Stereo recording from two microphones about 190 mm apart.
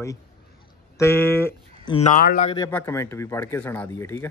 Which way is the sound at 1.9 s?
30° left (ahead or behind).